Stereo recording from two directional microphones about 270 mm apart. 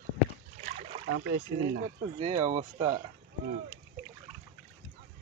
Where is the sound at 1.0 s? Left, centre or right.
Right.